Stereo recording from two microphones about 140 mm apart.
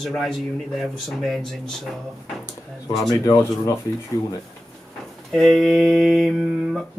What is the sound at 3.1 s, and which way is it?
Speech, 25° left (ahead or behind).